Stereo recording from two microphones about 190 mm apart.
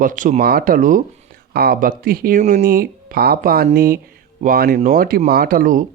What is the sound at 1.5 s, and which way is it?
Speech, 55° right (ahead or behind).